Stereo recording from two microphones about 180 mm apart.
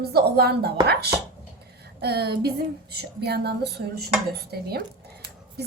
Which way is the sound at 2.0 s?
60° right (ahead or behind).